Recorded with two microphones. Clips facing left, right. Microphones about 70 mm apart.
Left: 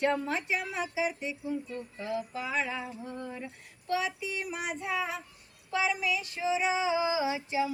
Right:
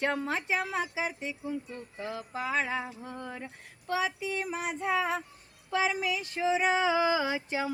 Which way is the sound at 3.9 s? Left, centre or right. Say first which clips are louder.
Right 1 dB; right.